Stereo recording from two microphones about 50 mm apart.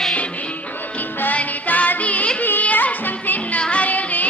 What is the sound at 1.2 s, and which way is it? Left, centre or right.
Music, left.